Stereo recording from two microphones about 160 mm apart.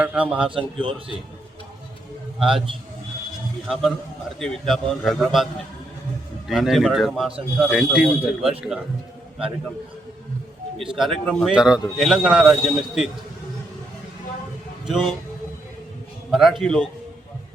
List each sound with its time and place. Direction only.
0.0 s a man's voice: 10° right (ahead or behind)
0.5 s a man's voice: 35° right (ahead or behind)
2.4 s speech: 5° right (ahead or behind)
3.7 s speech: centre (ahead or behind)
6.5 s speech: centre (ahead or behind)
10.8 s a man's voice: centre (ahead or behind)
11.5 s speech: 5° right (ahead or behind)
14.8 s a man's voice: centre (ahead or behind)
16.3 s speech: centre (ahead or behind)